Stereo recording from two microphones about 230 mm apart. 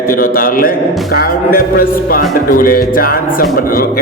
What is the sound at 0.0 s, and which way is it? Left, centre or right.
Speech, left.